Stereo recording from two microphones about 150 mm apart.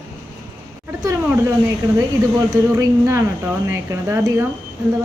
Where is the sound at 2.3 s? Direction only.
20° right (ahead or behind).